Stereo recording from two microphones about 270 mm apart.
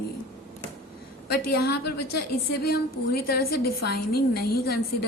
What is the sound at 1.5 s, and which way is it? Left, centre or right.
A woman's voice, left.